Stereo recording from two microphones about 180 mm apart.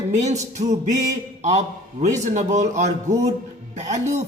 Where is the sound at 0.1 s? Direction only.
40° right (ahead or behind).